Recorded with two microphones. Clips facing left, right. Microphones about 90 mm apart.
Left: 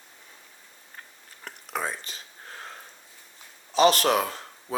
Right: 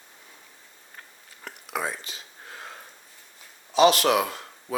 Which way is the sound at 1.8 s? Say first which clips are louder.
Right 1 dB; 40° left (ahead or behind).